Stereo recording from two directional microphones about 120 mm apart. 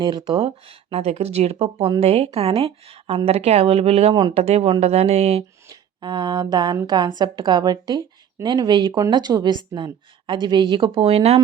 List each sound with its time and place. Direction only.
0.0 s a woman's voice: 40° right (ahead or behind)
0.3 s speech: 55° right (ahead or behind)
4.1 s a woman's voice: 40° right (ahead or behind)
4.4 s speech: 60° right (ahead or behind)
6.0 s a woman's voice: 40° right (ahead or behind); by 11.3 s 60° right (ahead or behind)